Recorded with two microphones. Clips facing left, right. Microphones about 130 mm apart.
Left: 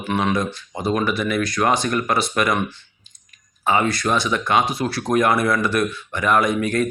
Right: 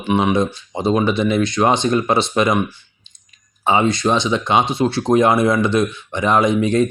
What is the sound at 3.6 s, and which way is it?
Speech, 25° right (ahead or behind).